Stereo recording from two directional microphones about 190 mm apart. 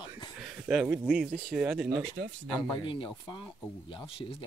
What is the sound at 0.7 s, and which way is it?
Speech, 5° right (ahead or behind).